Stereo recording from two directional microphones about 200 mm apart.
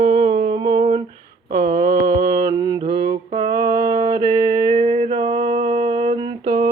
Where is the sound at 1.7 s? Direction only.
20° right (ahead or behind).